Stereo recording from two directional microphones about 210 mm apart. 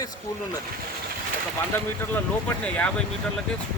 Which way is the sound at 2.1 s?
5° left (ahead or behind).